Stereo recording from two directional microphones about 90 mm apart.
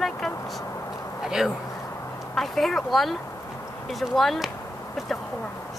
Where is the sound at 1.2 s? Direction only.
5° right (ahead or behind).